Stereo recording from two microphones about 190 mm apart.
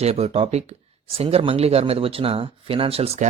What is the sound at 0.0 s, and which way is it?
Speech, 35° right (ahead or behind).